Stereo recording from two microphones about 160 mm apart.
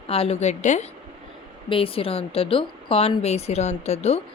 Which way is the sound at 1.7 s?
35° left (ahead or behind).